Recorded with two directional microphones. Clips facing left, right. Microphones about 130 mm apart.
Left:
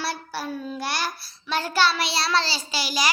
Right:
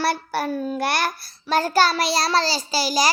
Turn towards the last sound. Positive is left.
turn(degrees=-40)  # may be behind; listen again after turning